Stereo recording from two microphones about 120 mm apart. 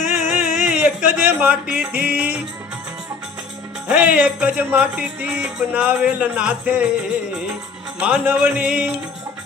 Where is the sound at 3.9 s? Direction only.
10° right (ahead or behind).